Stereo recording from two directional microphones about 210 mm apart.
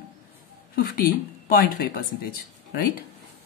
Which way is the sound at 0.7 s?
45° left (ahead or behind).